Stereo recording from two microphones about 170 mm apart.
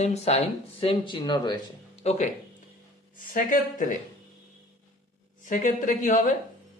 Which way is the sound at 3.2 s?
55° left (ahead or behind).